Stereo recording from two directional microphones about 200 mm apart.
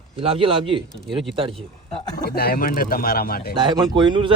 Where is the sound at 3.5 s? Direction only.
25° right (ahead or behind).